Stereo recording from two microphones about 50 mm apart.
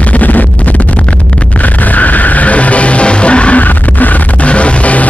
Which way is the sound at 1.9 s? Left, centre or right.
Left.